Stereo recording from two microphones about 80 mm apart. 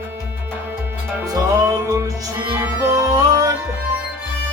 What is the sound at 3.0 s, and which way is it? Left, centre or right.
Music, right.